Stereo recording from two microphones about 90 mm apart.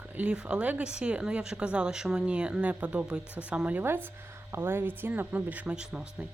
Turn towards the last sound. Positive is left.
turn(degrees=-10)  # may be behind; listen again after turning